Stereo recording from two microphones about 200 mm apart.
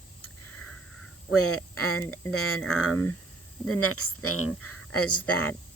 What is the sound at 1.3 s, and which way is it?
Speech, 90° left.